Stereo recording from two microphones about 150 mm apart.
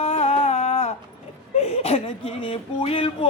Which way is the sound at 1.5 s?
45° left (ahead or behind).